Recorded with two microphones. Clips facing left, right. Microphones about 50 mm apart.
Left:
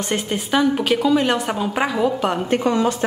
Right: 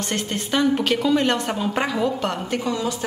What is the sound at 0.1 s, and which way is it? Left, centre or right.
A woman's voice, centre.